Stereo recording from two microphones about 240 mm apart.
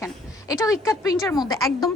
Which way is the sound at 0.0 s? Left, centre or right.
Centre.